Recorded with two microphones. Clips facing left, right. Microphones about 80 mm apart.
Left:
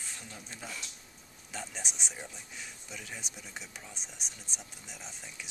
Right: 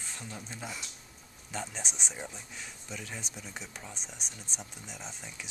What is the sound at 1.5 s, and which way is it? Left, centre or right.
Speech, centre.